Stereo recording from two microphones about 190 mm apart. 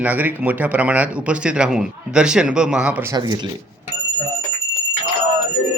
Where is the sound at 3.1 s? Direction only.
25° right (ahead or behind).